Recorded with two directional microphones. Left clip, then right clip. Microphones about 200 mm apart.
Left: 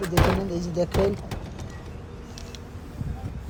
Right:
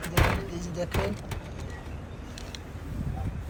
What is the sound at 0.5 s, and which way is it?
Speech, 30° left (ahead or behind).